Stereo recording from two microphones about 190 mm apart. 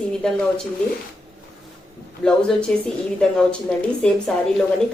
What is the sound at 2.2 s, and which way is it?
Speech, 5° left (ahead or behind).